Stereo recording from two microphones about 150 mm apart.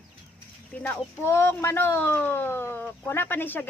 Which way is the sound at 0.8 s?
15° left (ahead or behind).